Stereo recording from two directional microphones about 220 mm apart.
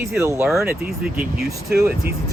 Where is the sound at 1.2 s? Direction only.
45° right (ahead or behind).